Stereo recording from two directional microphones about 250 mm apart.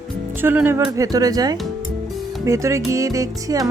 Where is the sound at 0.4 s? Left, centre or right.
Centre.